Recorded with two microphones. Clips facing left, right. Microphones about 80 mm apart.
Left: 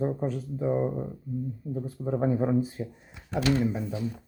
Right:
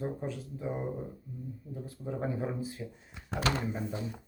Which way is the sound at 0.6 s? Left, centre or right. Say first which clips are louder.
Left 9 dB; centre.